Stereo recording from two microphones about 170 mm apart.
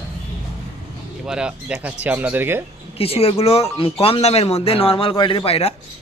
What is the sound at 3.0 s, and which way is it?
Speech, 35° left (ahead or behind).